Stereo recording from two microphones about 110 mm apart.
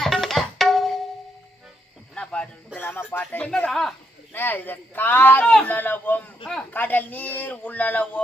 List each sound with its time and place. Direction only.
0.0 s tabla: centre (ahead or behind)
2.1 s a sound: 10° left (ahead or behind)
2.7 s speech: 15° left (ahead or behind)
4.3 s a man's voice: 15° left (ahead or behind)